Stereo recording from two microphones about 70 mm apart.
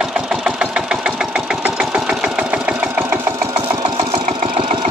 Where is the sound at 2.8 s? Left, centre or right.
Right.